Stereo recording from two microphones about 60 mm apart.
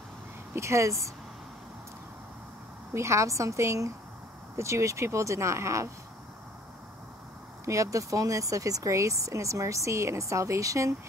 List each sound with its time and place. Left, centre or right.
0.6 s speech: right
2.9 s speech: right
7.6 s speech: right